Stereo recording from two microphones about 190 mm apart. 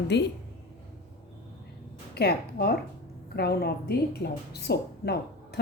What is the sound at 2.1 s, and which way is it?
A woman's voice, 55° left (ahead or behind).